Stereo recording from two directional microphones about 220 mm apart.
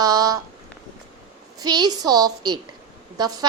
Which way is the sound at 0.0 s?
15° right (ahead or behind).